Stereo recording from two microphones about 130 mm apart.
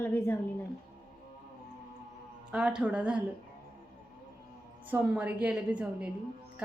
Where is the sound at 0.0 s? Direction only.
20° left (ahead or behind).